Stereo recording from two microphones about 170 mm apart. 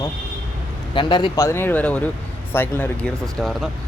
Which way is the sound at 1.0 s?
30° left (ahead or behind).